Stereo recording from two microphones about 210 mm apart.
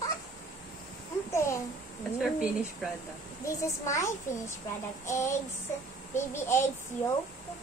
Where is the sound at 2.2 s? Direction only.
Centre (ahead or behind).